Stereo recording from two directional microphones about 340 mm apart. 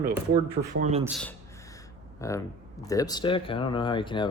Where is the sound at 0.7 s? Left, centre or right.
Right.